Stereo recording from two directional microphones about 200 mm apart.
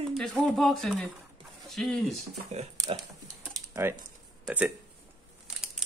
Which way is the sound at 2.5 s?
30° right (ahead or behind).